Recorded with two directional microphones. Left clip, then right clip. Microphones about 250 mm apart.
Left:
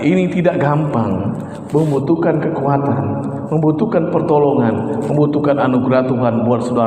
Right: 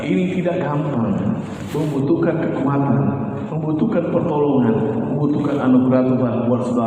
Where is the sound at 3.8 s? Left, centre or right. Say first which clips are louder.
Left 3 dB; left.